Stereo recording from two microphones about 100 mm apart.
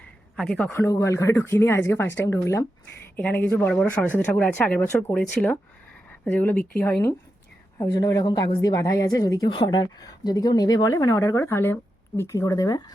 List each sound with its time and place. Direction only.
0.3 s speech: 10° left (ahead or behind); by 2.6 s 30° left (ahead or behind)
3.2 s speech: 15° left (ahead or behind)
7.8 s a woman's voice: 40° left (ahead or behind)
8.7 s a woman's voice: 35° left (ahead or behind)
9.5 s a woman's voice: 45° left (ahead or behind)